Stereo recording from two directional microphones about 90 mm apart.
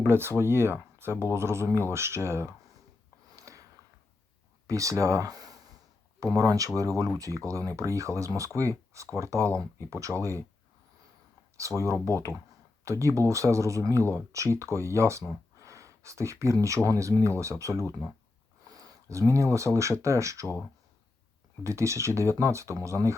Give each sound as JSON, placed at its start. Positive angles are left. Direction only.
{"t": 0.0, "sound": "speech", "side_deg": -25}
{"t": 3.3, "sound": "a sound", "side_deg": -35}
{"t": 4.6, "sound": "speech", "side_deg": -40}
{"t": 11.6, "sound": "speech", "side_deg": -35}
{"t": 12.8, "sound": "speech", "side_deg": -35}
{"t": 15.5, "sound": "gasp", "side_deg": -35}
{"t": 16.6, "sound": "speech", "side_deg": -35}
{"t": 18.6, "sound": "a sound", "side_deg": -40}
{"t": 19.3, "sound": "speech", "side_deg": -35}
{"t": 21.6, "sound": "speech", "side_deg": -35}